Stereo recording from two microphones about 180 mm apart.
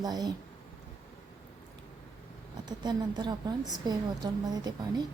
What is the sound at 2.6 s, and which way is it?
A woman's voice, 25° right (ahead or behind).